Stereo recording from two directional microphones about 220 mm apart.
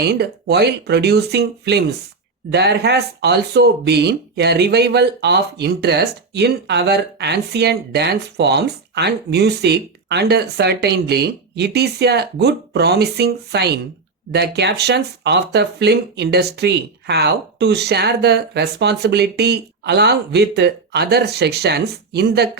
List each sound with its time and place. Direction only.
0.0 s speech: 45° right (ahead or behind)